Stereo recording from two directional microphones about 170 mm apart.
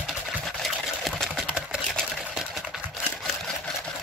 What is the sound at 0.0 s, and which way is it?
Sewing machine, centre (ahead or behind).